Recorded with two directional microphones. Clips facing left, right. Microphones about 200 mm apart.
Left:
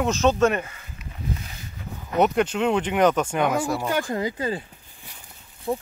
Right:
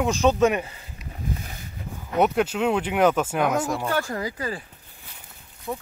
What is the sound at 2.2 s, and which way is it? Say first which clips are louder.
Speech: left 1 dB; 5° right (ahead or behind).